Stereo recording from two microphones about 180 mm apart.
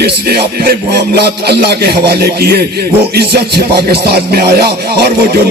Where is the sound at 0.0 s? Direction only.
65° right (ahead or behind).